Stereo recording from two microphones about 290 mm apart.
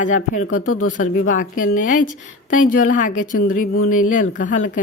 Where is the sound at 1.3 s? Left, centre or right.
Left.